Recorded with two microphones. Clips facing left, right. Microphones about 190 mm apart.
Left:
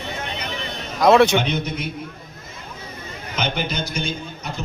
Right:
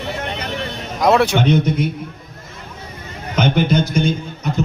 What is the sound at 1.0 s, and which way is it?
Speech, 10° right (ahead or behind).